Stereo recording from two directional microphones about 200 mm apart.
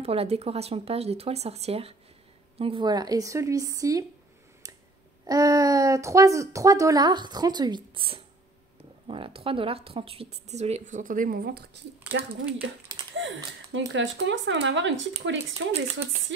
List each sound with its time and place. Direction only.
0.0 s speech: 30° right (ahead or behind)
5.2 s speech: 15° right (ahead or behind); by 11.8 s 55° right (ahead or behind)
12.1 s speech: 70° right (ahead or behind)